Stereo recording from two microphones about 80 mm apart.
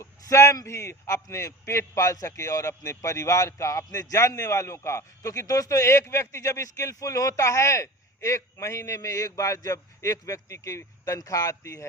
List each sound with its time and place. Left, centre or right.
0.0 s speech: left